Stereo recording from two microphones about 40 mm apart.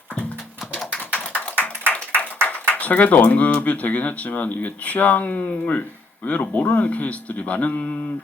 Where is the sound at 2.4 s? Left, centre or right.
Left.